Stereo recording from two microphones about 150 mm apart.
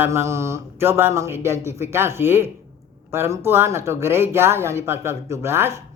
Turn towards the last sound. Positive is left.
turn(degrees=-15)  # may be behind; listen again after turning